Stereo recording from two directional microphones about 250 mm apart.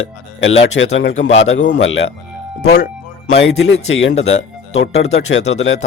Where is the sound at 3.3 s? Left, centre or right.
Left.